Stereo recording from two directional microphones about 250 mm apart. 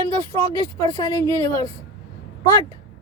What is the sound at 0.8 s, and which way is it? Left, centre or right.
Speech, centre.